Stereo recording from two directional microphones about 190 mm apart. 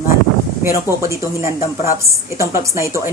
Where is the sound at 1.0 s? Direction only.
15° right (ahead or behind).